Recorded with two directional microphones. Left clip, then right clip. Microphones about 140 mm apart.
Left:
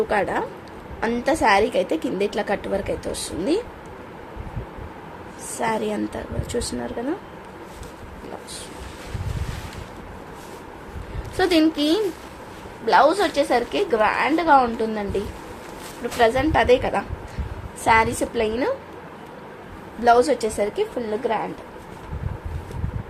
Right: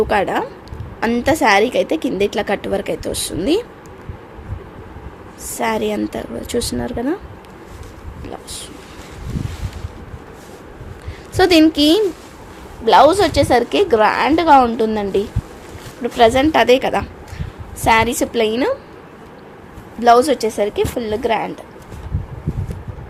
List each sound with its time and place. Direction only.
0.1 s a woman's voice: 50° right (ahead or behind)
5.5 s speech: 50° right (ahead or behind)
11.3 s a woman's voice: 75° right (ahead or behind); by 15.2 s 90° right
16.1 s a woman's voice: 75° right (ahead or behind)
20.0 s a woman's voice: 45° right (ahead or behind)
21.0 s speech: 65° right (ahead or behind)